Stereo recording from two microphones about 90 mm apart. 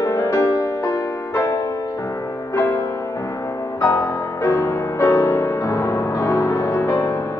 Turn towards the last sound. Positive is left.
turn(degrees=40)  # may be behind; listen again after turning